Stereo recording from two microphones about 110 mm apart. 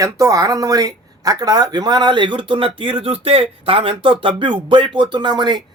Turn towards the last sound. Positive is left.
turn(degrees=-45)  # may be behind; listen again after turning